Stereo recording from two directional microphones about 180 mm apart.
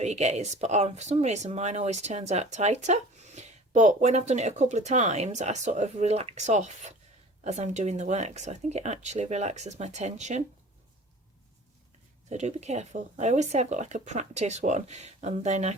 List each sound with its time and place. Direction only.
0.0 s speech: 40° right (ahead or behind)
12.3 s speech: 40° right (ahead or behind)